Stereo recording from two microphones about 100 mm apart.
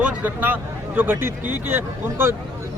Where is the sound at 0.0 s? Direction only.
15° right (ahead or behind).